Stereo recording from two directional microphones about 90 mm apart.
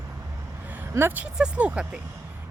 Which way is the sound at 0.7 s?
25° right (ahead or behind).